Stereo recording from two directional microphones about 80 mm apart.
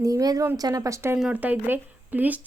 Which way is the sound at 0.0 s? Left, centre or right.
Right.